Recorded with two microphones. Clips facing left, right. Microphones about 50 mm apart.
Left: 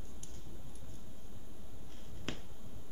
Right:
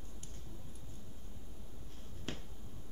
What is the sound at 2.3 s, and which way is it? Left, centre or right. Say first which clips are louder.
Finger snapping: left 1 dB; left.